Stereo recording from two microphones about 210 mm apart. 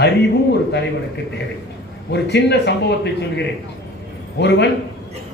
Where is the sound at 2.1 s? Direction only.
55° left (ahead or behind).